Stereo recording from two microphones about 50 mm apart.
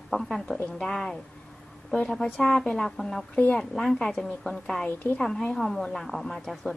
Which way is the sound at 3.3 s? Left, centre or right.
Left.